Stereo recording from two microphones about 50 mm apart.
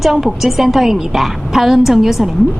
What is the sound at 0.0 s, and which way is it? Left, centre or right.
A woman's voice, centre.